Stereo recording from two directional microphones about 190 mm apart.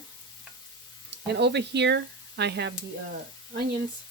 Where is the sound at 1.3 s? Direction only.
65° right (ahead or behind).